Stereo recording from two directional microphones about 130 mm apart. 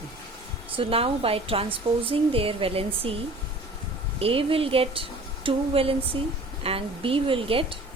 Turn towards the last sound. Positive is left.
turn(degrees=-45)  # may be behind; listen again after turning